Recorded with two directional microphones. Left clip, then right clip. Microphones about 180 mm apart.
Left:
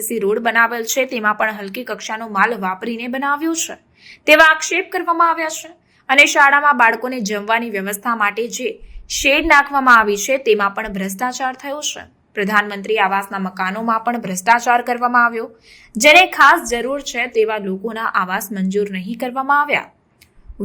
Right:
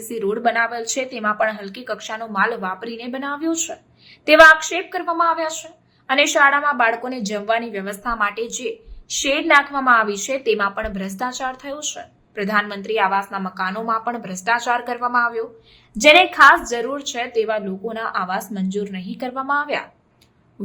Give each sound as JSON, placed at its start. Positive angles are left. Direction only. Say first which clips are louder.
{"t": 0.1, "sound": "a woman's voice", "louder": "left 3 dB", "side_deg": 15}